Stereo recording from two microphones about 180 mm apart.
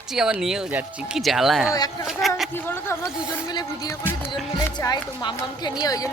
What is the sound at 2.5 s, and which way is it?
Speech, 10° left (ahead or behind).